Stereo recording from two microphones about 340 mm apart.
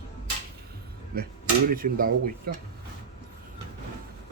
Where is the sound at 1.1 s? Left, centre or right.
Right.